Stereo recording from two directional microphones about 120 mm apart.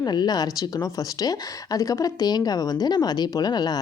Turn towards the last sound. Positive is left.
turn(degrees=35)  # may be behind; listen again after turning